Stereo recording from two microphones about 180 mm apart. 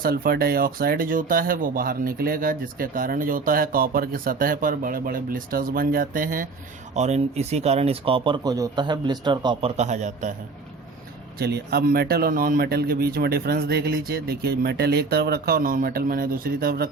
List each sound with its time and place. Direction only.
0.0 s speech: 55° right (ahead or behind)
6.9 s speech: 40° right (ahead or behind)
11.3 s speech: 65° right (ahead or behind)